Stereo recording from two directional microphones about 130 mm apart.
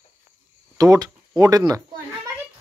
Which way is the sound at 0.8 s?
25° right (ahead or behind).